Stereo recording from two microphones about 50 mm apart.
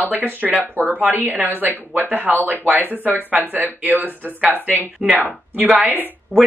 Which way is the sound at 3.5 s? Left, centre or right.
Right.